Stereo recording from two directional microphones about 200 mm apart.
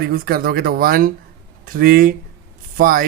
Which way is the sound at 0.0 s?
50° right (ahead or behind).